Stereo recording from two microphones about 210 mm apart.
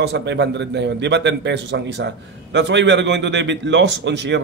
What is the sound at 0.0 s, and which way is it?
A man's voice, 55° right (ahead or behind).